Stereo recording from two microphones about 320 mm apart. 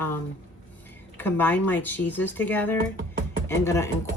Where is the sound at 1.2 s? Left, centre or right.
Centre.